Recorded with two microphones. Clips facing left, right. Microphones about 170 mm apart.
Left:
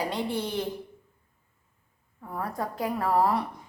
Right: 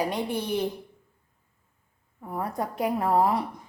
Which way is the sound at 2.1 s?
20° right (ahead or behind).